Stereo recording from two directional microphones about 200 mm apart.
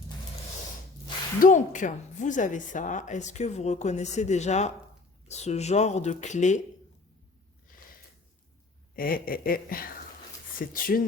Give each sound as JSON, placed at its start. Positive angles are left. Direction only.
{"t": 1.4, "sound": "a woman's voice", "side_deg": 40}
{"t": 9.0, "sound": "speech", "side_deg": 45}